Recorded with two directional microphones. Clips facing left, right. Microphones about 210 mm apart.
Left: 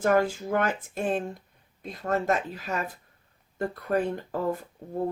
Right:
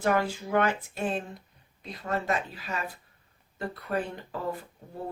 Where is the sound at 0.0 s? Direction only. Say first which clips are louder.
Left 4 dB; 45° left (ahead or behind).